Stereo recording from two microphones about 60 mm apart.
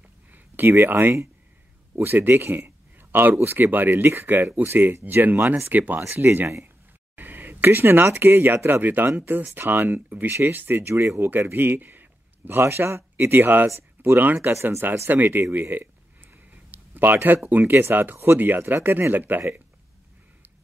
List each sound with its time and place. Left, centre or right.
0.3 s a sound: right
2.0 s speech: right
3.9 s speech: right
7.2 s speech: right
11.2 s speech: right
14.5 s speech: right
15.0 s speech: right
15.5 s a sound: right
17.5 s speech: right